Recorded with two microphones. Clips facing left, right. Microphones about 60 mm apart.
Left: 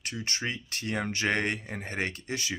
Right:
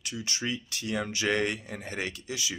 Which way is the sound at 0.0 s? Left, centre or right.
Left.